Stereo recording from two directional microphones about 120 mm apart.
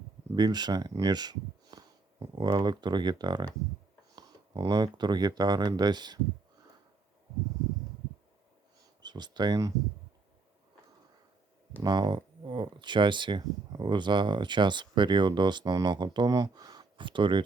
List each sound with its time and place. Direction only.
0.3 s speech: 35° right (ahead or behind)
9.0 s speech: 35° right (ahead or behind)
11.8 s speech: 35° right (ahead or behind)